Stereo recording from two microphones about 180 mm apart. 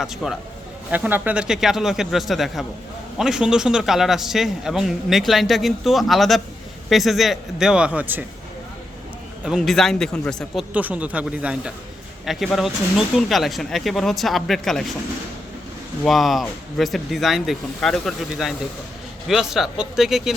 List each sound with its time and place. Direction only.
0.0 s a man's voice: centre (ahead or behind)
9.4 s a man's voice: centre (ahead or behind)
16.0 s a man's voice: centre (ahead or behind)